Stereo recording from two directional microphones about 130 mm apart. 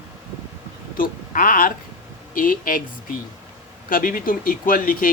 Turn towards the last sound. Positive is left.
turn(degrees=90)